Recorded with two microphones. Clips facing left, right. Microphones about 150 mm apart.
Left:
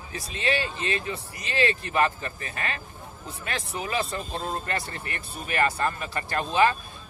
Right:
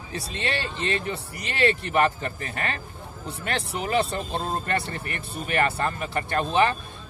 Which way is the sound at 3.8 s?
30° right (ahead or behind).